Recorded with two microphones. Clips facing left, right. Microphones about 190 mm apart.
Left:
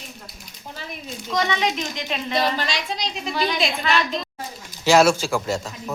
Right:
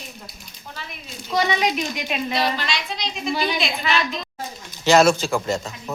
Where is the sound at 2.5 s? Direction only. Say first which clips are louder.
Left 1 dB; 40° left (ahead or behind).